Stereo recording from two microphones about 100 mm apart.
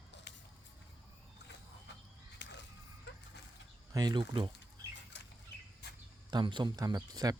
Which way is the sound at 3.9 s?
45° right (ahead or behind).